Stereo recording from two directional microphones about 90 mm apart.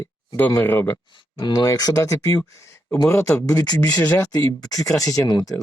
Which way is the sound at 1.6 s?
40° left (ahead or behind).